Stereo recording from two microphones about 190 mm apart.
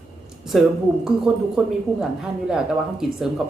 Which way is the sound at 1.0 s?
5° right (ahead or behind).